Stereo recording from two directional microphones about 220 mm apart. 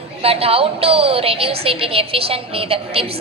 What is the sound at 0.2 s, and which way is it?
A woman's voice, 25° right (ahead or behind).